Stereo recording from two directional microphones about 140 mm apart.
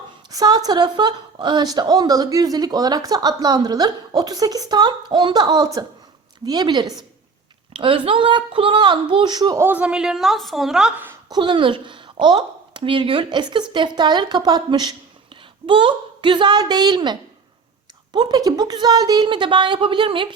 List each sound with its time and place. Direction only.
0.3 s a woman's voice: 25° right (ahead or behind)
9.6 s a woman's voice: 15° right (ahead or behind)
11.3 s a woman's voice: 35° right (ahead or behind)